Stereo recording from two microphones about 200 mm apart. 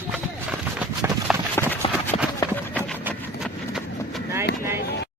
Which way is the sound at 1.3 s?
Centre (ahead or behind).